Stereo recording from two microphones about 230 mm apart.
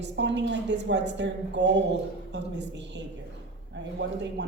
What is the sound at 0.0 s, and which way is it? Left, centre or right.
A woman's voice, right.